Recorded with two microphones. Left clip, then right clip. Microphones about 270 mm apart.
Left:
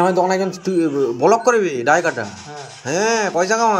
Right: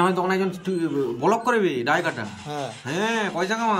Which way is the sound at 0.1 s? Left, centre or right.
Centre.